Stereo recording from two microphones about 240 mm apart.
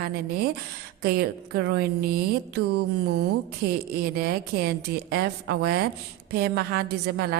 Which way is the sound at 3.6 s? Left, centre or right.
Right.